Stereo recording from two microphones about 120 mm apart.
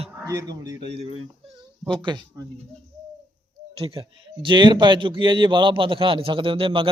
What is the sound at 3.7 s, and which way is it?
A man's voice, 50° right (ahead or behind).